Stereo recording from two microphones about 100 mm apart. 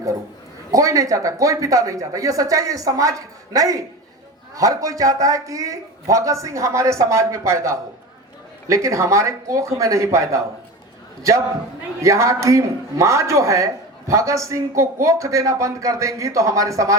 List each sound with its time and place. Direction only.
0.7 s a man's voice: 35° right (ahead or behind)